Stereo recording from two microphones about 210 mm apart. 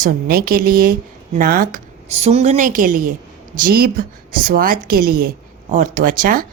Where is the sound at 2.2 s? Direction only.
30° right (ahead or behind).